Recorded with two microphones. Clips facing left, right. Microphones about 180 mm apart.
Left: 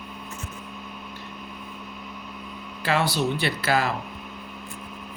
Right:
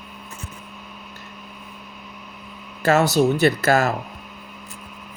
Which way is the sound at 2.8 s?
45° right (ahead or behind).